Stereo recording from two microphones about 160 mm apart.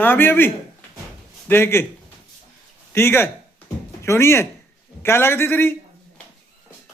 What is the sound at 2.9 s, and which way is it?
A man's voice, 15° left (ahead or behind).